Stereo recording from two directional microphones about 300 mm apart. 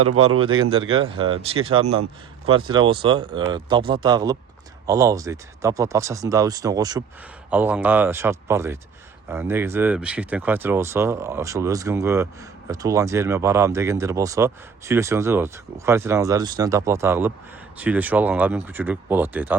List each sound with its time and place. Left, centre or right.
0.3 s speech: centre